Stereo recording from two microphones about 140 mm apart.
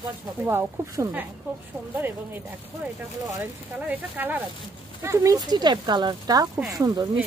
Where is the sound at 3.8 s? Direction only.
10° right (ahead or behind).